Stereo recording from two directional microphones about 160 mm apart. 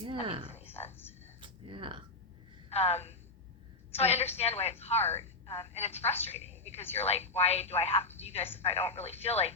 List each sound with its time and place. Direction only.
0.0 s speech: 35° right (ahead or behind)
0.5 s a sound: 15° left (ahead or behind)
0.9 s speech: 15° left (ahead or behind)
1.4 s speech: 30° right (ahead or behind)
2.6 s a woman's voice: 40° left (ahead or behind)